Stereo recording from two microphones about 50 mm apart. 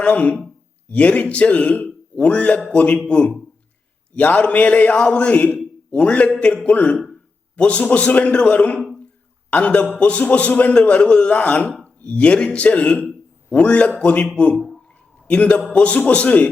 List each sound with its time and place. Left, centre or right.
0.0 s a man's voice: left
14.5 s speech: centre
15.3 s a man's voice: left